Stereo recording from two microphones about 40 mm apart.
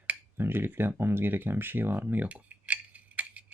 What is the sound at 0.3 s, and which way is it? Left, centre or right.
Speech, right.